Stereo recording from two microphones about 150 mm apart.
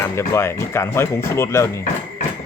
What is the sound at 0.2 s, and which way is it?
Speech, 15° left (ahead or behind).